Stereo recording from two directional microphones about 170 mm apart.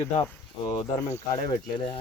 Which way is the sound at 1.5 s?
30° left (ahead or behind).